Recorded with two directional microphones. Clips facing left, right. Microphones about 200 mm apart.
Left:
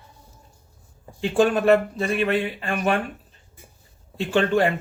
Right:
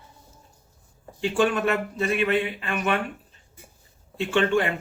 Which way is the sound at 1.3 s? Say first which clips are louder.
Left 6 dB; 40° left (ahead or behind).